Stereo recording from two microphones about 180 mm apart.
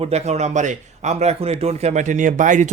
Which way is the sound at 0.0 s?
35° right (ahead or behind).